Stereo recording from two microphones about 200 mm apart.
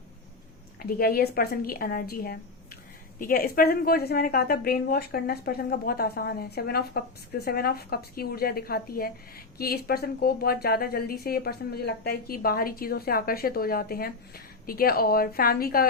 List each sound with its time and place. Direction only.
0.8 s a woman's voice: 45° left (ahead or behind)